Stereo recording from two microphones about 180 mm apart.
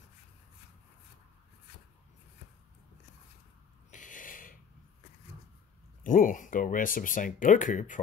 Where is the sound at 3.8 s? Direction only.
45° left (ahead or behind).